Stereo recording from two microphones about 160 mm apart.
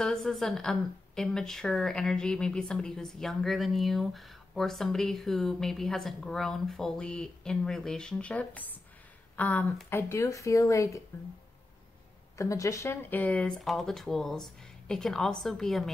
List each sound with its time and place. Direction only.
0.0 s a woman's voice: centre (ahead or behind); by 11.0 s 20° left (ahead or behind)
12.4 s a woman's voice: 20° left (ahead or behind); by 15.9 s centre (ahead or behind)